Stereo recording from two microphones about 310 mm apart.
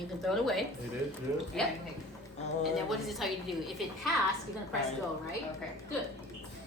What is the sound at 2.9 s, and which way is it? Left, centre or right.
Speech, centre.